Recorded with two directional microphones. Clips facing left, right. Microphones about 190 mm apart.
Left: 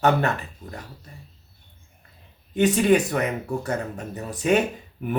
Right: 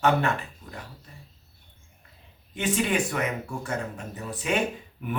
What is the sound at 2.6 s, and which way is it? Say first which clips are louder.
Speech: left 7 dB; 40° left (ahead or behind).